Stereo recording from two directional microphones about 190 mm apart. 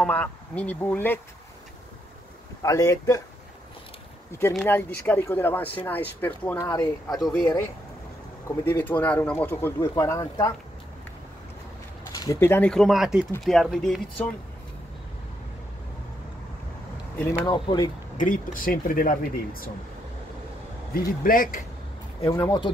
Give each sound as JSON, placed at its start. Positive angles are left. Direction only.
{"t": 0.0, "sound": "speech", "side_deg": 10}
{"t": 2.6, "sound": "speech", "side_deg": 15}
{"t": 4.6, "sound": "speech", "side_deg": 10}
{"t": 6.6, "sound": "speech", "side_deg": 20}
{"t": 7.2, "sound": "speech", "side_deg": 0}
{"t": 12.2, "sound": "speech", "side_deg": 15}
{"t": 17.5, "sound": "speech", "side_deg": 20}
{"t": 18.1, "sound": "speech", "side_deg": 45}
{"t": 20.9, "sound": "speech", "side_deg": 45}
{"t": 22.3, "sound": "speech", "side_deg": 25}